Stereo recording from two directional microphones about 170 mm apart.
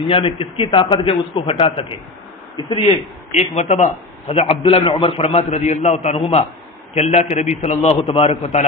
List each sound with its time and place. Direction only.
0.1 s a man's voice: 35° left (ahead or behind)